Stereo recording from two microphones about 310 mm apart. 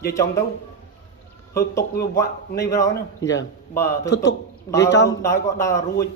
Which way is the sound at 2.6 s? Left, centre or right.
Centre.